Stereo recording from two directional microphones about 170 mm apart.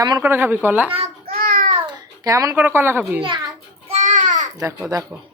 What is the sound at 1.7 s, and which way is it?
Babbling, 20° right (ahead or behind).